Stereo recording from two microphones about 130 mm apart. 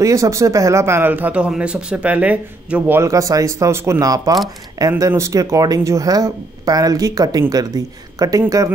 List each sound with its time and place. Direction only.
0.0 s speech: 25° right (ahead or behind)
3.0 s speech: 25° right (ahead or behind)